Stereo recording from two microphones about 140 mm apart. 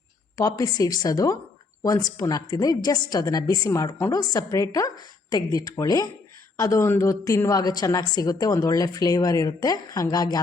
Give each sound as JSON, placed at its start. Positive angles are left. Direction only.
{"t": 0.3, "sound": "a woman's voice", "side_deg": 25}